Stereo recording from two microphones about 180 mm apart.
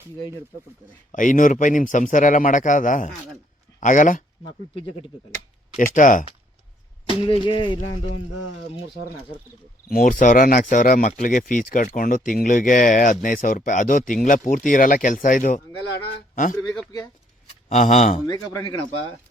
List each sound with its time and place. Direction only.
1.1 s speech: 45° left (ahead or behind)
5.7 s speech: 45° left (ahead or behind)
7.3 s speech: 30° left (ahead or behind)
9.9 s a man's voice: 45° left (ahead or behind)
17.7 s speech: 40° left (ahead or behind)
18.3 s speech: 25° left (ahead or behind)